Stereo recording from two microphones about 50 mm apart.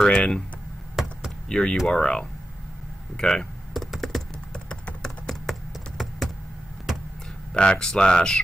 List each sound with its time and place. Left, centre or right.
0.0 s speech: centre
1.0 s a sound: centre
1.5 s speech: centre
3.7 s computer keyboard: centre
5.3 s computer keyboard: centre
7.5 s speech: centre